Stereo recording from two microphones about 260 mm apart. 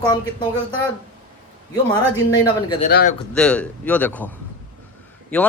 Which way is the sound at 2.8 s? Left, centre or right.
Left.